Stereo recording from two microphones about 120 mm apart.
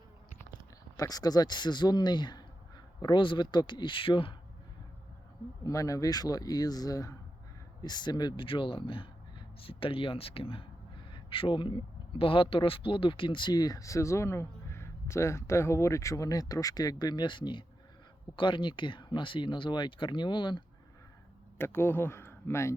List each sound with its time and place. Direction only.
0.9 s a man's voice: 30° left (ahead or behind)
5.6 s a man's voice: 30° left (ahead or behind)
21.6 s speech: 20° left (ahead or behind)